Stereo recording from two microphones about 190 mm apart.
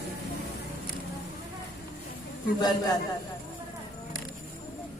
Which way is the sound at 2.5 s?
20° left (ahead or behind).